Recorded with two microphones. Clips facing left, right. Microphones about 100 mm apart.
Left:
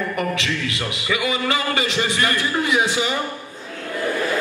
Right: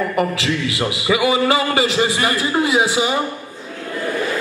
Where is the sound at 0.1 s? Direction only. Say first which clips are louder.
Right 4 dB; 20° right (ahead or behind).